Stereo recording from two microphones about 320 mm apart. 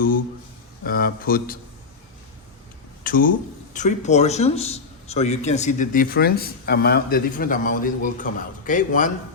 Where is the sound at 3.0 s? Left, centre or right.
Left.